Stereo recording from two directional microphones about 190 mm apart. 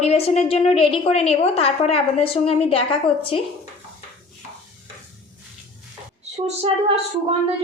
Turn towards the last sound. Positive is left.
turn(degrees=-30)  # may be behind; listen again after turning